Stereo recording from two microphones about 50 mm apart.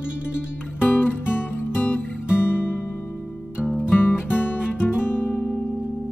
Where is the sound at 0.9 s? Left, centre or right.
Left.